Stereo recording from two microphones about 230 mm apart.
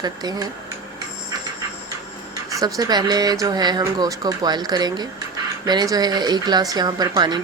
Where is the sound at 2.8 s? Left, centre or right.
Centre.